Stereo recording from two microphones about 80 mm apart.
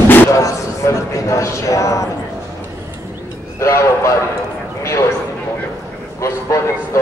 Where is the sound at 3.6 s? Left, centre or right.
Left.